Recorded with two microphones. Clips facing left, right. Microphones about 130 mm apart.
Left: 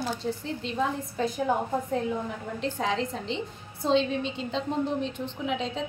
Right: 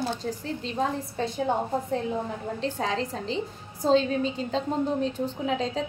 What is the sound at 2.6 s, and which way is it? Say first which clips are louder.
A woman's voice: left 1 dB; 35° right (ahead or behind).